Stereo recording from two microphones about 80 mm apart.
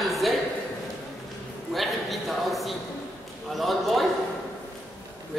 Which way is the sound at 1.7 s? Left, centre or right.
Centre.